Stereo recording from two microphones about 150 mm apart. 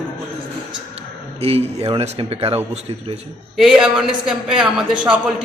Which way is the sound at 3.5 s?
5° right (ahead or behind).